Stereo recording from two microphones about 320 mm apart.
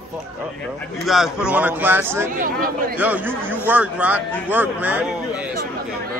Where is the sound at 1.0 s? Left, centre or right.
Centre.